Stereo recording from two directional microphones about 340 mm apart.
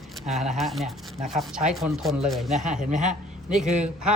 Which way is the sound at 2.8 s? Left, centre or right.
Right.